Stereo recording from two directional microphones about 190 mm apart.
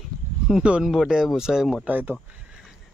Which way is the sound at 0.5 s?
5° right (ahead or behind).